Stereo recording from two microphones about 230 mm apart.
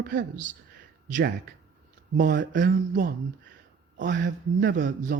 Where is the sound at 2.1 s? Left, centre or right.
Right.